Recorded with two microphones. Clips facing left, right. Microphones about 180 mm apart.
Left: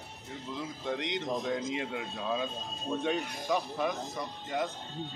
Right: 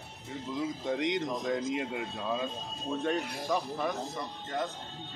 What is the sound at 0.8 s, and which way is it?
Speech, 5° right (ahead or behind).